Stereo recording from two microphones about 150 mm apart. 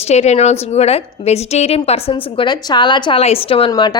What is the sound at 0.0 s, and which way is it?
A woman's voice, 45° left (ahead or behind).